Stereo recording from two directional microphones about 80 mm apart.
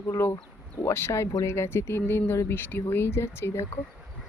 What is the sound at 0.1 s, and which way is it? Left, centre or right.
Speech, left.